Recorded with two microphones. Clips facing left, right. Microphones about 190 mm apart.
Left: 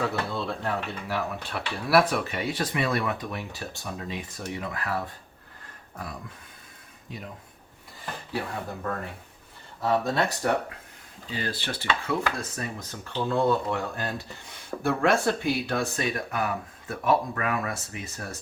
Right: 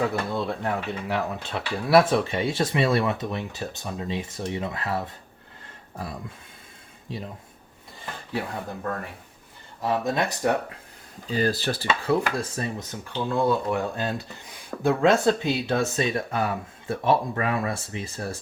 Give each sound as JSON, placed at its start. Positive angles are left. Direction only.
{"t": 0.1, "sound": "speech", "side_deg": -15}
{"t": 7.1, "sound": "speech", "side_deg": -30}
{"t": 9.8, "sound": "speech", "side_deg": -15}
{"t": 11.3, "sound": "speech", "side_deg": -40}
{"t": 12.9, "sound": "speech", "side_deg": -10}